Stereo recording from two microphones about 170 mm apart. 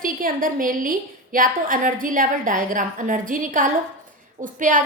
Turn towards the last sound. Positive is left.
turn(degrees=-50)  # may be behind; listen again after turning